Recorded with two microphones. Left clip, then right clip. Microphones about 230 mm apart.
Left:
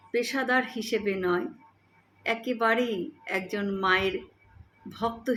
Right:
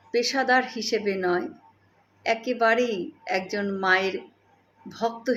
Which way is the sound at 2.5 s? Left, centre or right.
Left.